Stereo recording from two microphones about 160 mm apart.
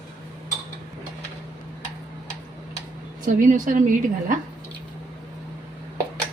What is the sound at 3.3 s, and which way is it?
A woman's voice, 55° right (ahead or behind).